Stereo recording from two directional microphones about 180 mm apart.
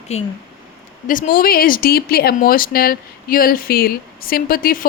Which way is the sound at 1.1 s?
50° left (ahead or behind).